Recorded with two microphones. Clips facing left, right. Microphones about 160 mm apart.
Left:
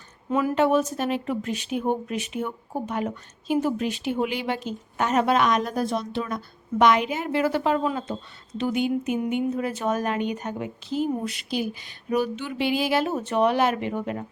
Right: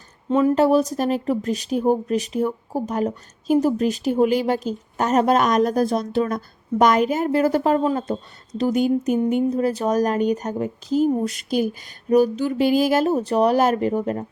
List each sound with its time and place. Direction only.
0.3 s speech: 30° right (ahead or behind)